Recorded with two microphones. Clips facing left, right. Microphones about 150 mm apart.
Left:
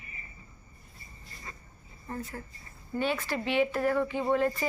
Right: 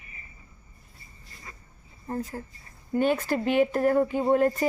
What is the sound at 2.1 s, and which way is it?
Speech, 35° right (ahead or behind).